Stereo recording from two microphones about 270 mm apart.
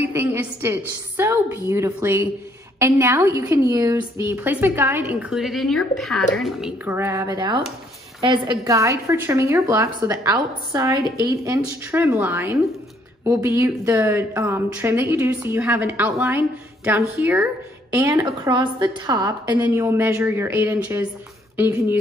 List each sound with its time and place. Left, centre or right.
0.0 s a woman's voice: centre